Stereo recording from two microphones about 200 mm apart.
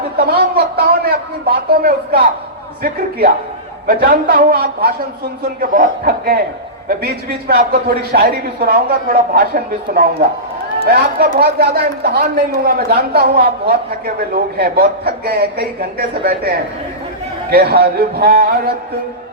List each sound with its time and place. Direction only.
0.2 s a man's voice: 50° right (ahead or behind)